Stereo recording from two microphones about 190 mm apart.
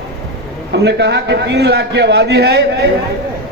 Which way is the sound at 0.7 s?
65° right (ahead or behind).